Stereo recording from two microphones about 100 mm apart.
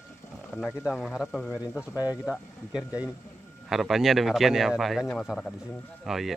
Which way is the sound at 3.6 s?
5° right (ahead or behind).